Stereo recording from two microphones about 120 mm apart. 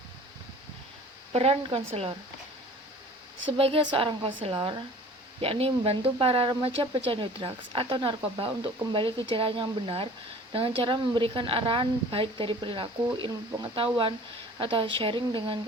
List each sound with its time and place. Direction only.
1.3 s speech: 55° right (ahead or behind)
3.6 s speech: 50° right (ahead or behind)
5.4 s speech: 50° right (ahead or behind)